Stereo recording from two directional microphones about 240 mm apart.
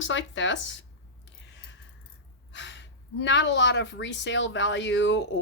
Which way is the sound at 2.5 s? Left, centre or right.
Left.